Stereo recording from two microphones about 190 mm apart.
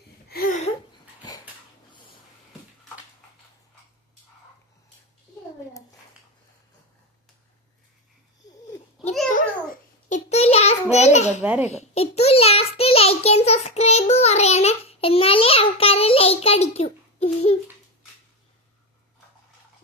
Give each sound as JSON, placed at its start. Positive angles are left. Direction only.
{"t": 0.3, "sound": "a sound", "side_deg": 50}
{"t": 1.9, "sound": "wheeze", "side_deg": 25}
{"t": 9.0, "sound": "a sound", "side_deg": 0}
{"t": 9.3, "sound": "babbling", "side_deg": 40}
{"t": 10.9, "sound": "a child's voice", "side_deg": 35}
{"t": 11.3, "sound": "a child's voice", "side_deg": -5}
{"t": 11.7, "sound": "child singing", "side_deg": 35}